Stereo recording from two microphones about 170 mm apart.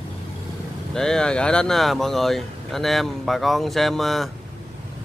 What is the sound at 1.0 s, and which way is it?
Speech, 5° left (ahead or behind).